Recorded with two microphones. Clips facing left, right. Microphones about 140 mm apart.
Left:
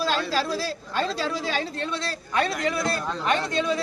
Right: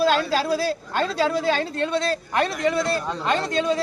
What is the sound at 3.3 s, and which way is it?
Speech, 35° right (ahead or behind).